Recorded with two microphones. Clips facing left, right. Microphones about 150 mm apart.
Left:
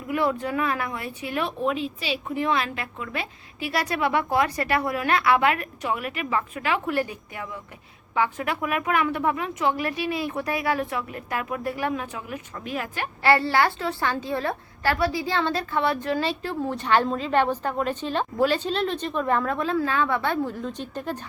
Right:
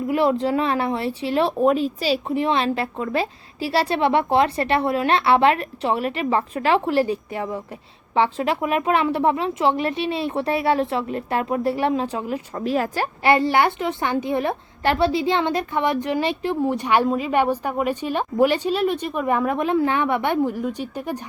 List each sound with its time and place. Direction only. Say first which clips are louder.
0.1 s a woman's voice: right 5 dB; 25° right (ahead or behind)
1.5 s a woman's voice: right 8 dB; 40° right (ahead or behind)
2.3 s a woman's voice: right 1 dB; 25° right (ahead or behind)
13.2 s a woman's voice: right 3 dB; 20° right (ahead or behind)